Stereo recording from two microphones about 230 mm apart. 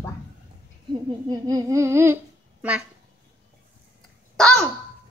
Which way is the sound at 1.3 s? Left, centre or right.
Centre.